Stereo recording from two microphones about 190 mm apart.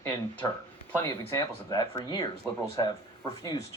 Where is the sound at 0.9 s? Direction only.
15° left (ahead or behind).